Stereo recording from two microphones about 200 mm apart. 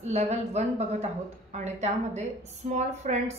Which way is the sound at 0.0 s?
35° right (ahead or behind).